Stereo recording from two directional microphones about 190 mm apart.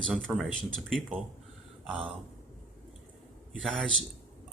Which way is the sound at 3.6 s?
5° left (ahead or behind).